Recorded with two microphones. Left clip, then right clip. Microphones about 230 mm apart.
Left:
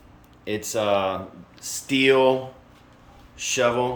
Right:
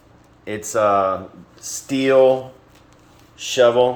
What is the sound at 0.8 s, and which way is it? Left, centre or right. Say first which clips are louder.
Speech: right 6 dB; centre.